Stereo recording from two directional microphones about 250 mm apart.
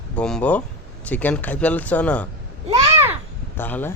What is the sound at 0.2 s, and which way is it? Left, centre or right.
Speech, centre.